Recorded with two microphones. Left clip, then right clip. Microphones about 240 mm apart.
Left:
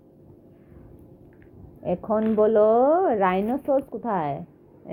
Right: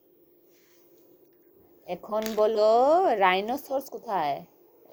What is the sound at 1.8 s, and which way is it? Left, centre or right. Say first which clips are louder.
Speech: left 6 dB; right.